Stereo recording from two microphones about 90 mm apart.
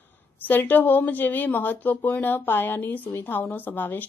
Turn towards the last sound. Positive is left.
turn(degrees=20)  # may be behind; listen again after turning